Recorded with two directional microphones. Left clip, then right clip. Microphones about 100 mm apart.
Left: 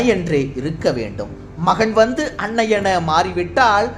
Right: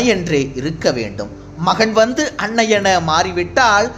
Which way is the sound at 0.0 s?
35° right (ahead or behind).